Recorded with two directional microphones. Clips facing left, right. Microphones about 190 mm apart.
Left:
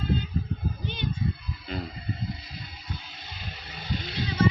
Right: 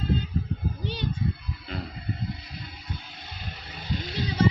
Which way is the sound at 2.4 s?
55° right (ahead or behind).